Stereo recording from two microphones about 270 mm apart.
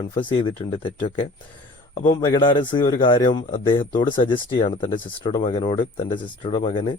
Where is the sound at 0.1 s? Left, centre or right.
Centre.